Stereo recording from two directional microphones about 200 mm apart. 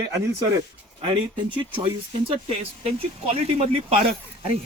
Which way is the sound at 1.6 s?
25° right (ahead or behind).